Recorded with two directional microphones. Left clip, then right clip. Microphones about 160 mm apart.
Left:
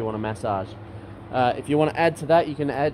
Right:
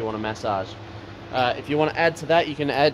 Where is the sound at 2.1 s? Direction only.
35° left (ahead or behind).